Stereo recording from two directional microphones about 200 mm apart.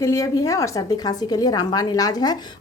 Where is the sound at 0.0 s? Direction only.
15° left (ahead or behind).